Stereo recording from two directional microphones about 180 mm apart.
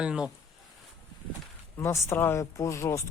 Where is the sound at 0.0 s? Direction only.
5° right (ahead or behind).